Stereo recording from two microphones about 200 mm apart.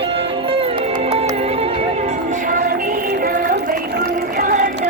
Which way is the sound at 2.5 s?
45° right (ahead or behind).